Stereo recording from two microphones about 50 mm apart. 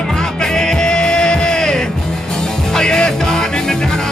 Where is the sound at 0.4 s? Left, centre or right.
Centre.